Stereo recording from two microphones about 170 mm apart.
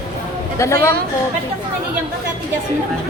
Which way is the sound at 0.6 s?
15° left (ahead or behind).